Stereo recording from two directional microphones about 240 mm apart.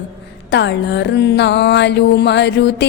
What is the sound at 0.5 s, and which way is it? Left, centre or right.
Music, left.